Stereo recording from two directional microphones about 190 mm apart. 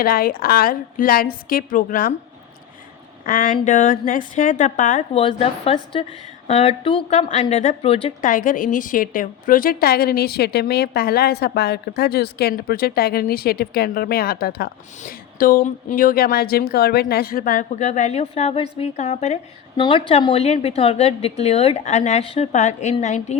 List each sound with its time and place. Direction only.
0.0 s a woman's voice: 50° left (ahead or behind)
3.2 s a woman's voice: 45° left (ahead or behind); by 8.1 s 30° left (ahead or behind)
8.2 s a woman's voice: 45° left (ahead or behind)